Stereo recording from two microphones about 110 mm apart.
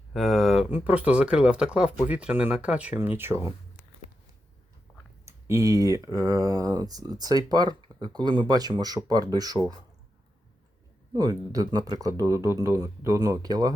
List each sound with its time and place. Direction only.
0.1 s speech: centre (ahead or behind); by 3.5 s 20° right (ahead or behind)
5.2 s speech: 25° right (ahead or behind)
11.1 s speech: 40° right (ahead or behind)